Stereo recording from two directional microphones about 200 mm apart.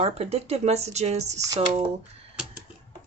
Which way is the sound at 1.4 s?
15° right (ahead or behind).